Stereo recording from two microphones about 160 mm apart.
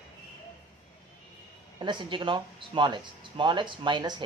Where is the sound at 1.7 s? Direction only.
30° right (ahead or behind).